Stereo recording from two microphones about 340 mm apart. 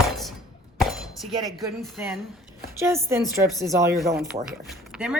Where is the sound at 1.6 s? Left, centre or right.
Centre.